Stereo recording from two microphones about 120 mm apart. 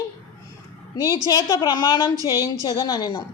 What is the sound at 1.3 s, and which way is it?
Speech, 30° left (ahead or behind).